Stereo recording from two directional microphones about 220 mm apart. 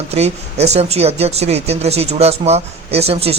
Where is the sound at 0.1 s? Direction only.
30° right (ahead or behind).